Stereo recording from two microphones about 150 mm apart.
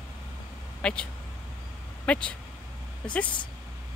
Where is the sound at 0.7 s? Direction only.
5° left (ahead or behind).